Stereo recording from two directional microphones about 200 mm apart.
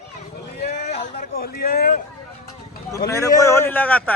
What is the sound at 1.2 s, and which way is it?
Speech, 50° left (ahead or behind).